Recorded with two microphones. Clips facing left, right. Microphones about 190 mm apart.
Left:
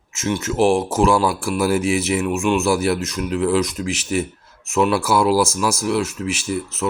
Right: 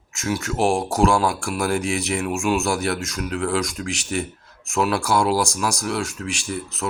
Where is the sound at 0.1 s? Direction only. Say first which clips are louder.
Left 3 dB; centre (ahead or behind).